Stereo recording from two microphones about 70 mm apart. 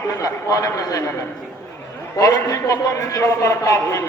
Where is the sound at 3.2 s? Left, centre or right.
Left.